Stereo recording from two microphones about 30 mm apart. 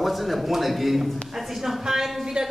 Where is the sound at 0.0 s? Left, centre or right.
Centre.